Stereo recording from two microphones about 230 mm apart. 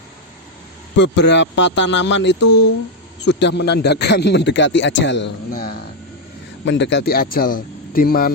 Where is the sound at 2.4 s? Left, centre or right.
Left.